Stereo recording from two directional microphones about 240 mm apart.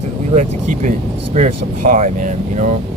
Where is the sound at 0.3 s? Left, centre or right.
Right.